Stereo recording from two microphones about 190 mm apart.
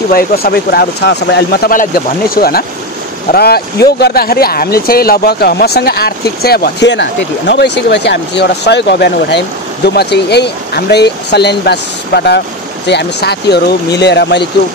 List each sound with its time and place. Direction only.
0.1 s speech: 55° left (ahead or behind)
1.7 s speech: 50° left (ahead or behind)